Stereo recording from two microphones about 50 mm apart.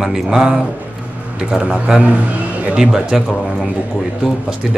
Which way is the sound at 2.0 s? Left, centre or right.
Right.